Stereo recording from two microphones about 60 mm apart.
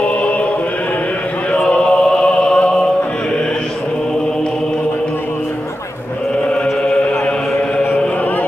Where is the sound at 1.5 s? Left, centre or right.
Centre.